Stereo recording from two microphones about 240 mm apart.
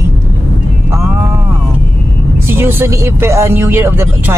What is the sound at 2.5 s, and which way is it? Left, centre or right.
Speech, centre.